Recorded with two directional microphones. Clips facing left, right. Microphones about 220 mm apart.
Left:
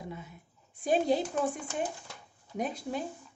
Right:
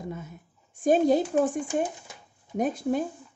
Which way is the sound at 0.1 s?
45° right (ahead or behind).